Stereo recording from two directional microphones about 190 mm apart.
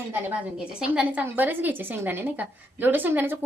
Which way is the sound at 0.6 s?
5° right (ahead or behind).